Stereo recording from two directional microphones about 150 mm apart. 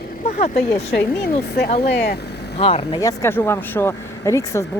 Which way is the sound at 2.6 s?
40° left (ahead or behind).